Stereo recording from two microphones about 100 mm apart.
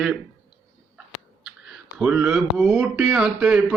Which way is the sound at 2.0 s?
10° right (ahead or behind).